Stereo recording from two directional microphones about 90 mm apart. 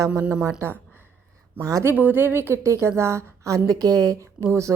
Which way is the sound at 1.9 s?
25° right (ahead or behind).